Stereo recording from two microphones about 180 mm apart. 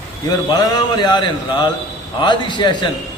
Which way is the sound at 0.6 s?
25° left (ahead or behind).